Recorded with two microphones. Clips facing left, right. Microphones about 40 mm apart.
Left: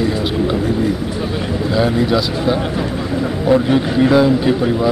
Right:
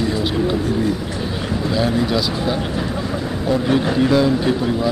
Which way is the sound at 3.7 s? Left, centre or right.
Centre.